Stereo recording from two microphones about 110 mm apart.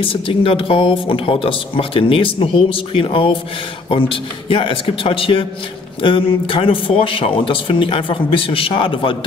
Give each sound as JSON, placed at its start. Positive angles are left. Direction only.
{"t": 0.0, "sound": "speech", "side_deg": 55}